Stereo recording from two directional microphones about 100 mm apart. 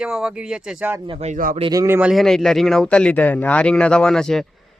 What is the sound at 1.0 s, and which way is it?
Speech, 75° right (ahead or behind).